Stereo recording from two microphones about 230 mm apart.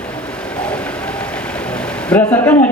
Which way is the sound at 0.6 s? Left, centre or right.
Centre.